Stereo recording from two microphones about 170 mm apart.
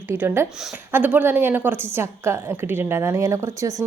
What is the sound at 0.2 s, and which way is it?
A woman's voice, 15° right (ahead or behind).